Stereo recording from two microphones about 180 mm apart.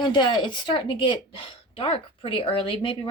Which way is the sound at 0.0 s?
25° left (ahead or behind).